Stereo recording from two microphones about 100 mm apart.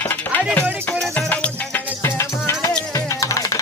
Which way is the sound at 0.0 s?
20° left (ahead or behind).